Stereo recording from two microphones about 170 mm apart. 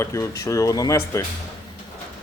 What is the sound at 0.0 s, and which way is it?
Speech, 15° left (ahead or behind).